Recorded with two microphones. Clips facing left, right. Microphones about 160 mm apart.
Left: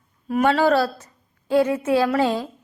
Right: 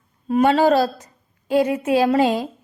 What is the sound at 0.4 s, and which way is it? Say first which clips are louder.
A woman's voice: right 2 dB; 15° right (ahead or behind).